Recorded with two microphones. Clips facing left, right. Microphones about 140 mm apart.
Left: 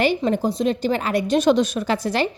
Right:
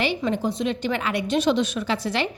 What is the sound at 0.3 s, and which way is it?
A woman's voice, 40° left (ahead or behind).